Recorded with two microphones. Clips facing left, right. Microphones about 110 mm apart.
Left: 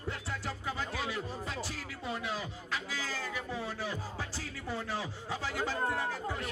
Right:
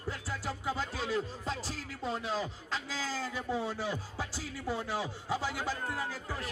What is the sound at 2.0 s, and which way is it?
Speech, 30° right (ahead or behind).